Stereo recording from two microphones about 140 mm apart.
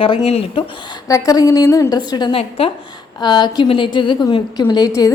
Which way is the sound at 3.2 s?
30° left (ahead or behind).